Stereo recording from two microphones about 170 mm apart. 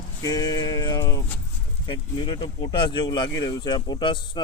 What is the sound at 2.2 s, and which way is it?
Speech, 25° left (ahead or behind).